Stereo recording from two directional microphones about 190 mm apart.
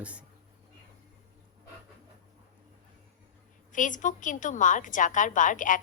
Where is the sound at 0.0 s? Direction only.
5° right (ahead or behind).